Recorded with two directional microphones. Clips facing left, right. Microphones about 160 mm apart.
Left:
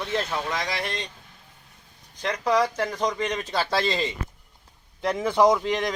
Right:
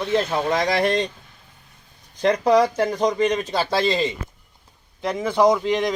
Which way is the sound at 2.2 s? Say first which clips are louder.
Right 6 dB; 35° right (ahead or behind).